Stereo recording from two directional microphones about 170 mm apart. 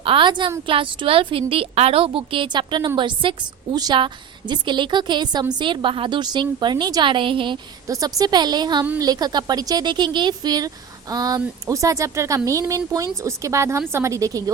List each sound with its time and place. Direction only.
0.0 s a woman's voice: 30° right (ahead or behind)